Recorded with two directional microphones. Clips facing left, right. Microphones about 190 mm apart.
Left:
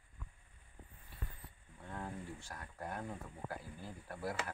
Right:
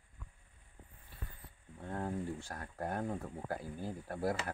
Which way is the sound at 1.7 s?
40° right (ahead or behind).